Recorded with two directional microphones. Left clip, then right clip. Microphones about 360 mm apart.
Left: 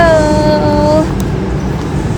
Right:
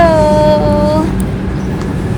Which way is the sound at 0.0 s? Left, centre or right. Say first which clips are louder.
Right 1 dB; centre.